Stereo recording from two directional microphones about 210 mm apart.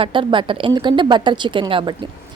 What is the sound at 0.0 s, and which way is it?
A woman's voice, 25° right (ahead or behind).